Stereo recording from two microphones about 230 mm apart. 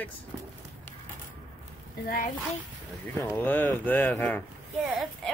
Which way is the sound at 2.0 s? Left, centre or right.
Left.